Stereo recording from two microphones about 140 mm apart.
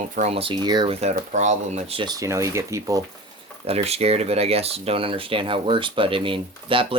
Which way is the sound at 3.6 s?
50° right (ahead or behind).